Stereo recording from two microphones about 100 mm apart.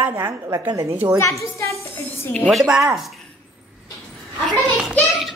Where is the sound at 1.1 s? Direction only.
30° left (ahead or behind).